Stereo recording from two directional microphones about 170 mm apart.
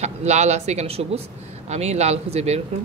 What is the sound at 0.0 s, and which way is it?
Speech, 40° right (ahead or behind).